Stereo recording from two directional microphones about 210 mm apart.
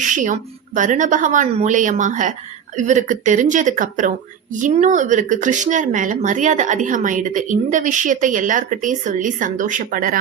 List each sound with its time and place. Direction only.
0.0 s speech: 35° right (ahead or behind)